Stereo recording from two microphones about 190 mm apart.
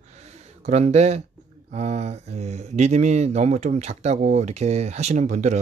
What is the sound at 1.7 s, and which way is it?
Speech, 35° right (ahead or behind).